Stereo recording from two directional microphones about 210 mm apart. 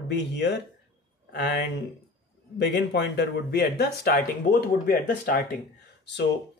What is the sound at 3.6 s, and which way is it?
Speech, 45° left (ahead or behind).